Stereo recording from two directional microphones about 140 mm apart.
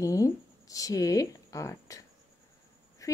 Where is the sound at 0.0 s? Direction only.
25° left (ahead or behind).